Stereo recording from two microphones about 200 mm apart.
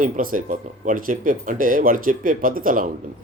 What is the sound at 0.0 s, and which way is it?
Speech, 45° right (ahead or behind).